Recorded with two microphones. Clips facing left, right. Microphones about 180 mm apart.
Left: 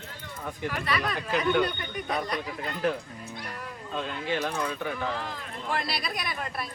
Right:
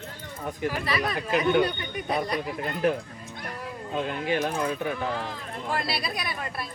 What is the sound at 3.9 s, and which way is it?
Speech, 15° right (ahead or behind).